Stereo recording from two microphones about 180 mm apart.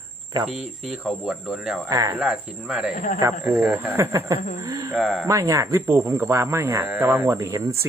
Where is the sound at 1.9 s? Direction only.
20° right (ahead or behind).